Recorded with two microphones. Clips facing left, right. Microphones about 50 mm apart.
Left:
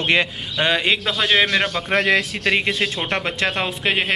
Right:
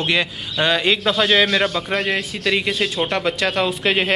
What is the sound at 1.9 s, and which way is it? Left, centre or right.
Speech, left.